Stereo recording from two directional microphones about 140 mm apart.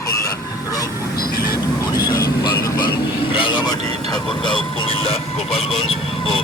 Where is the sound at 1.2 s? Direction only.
90° left.